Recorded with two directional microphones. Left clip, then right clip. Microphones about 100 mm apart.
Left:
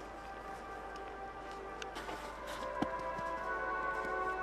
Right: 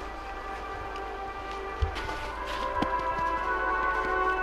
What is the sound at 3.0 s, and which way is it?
Music, 15° right (ahead or behind).